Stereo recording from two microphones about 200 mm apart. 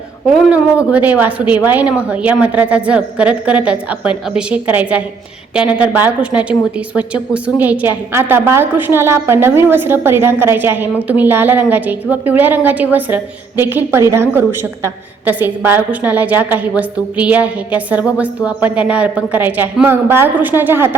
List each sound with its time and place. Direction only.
0.3 s a woman's voice: 5° right (ahead or behind)